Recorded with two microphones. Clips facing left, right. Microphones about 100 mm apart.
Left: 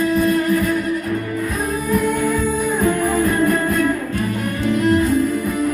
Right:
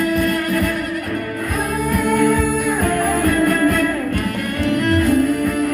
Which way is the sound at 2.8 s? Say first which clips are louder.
Left 2 dB; 65° right (ahead or behind).